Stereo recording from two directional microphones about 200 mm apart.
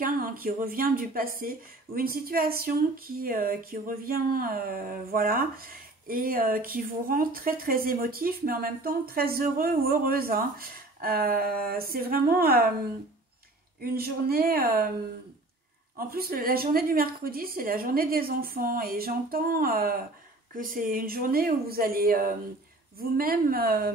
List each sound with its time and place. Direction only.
0.0 s a woman's voice: 45° right (ahead or behind)
13.7 s a woman's voice: 50° right (ahead or behind)
16.1 s a woman's voice: 50° right (ahead or behind)